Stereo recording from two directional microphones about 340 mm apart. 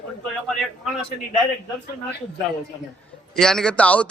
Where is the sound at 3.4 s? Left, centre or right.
Centre.